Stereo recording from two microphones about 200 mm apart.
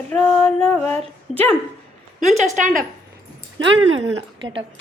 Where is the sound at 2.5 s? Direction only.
40° right (ahead or behind).